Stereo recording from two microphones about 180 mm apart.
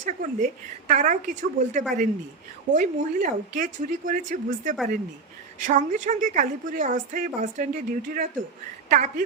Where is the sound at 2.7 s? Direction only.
45° right (ahead or behind).